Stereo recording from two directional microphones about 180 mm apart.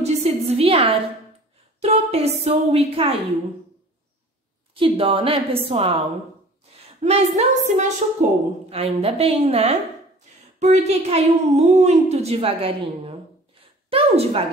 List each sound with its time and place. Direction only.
0.0 s a sound: 35° right (ahead or behind)
1.8 s a woman's voice: 35° right (ahead or behind)
4.7 s a woman's voice: 30° right (ahead or behind)
7.0 s a woman's voice: 40° right (ahead or behind)